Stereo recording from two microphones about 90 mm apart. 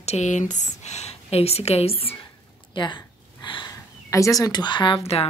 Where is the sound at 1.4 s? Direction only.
90° left.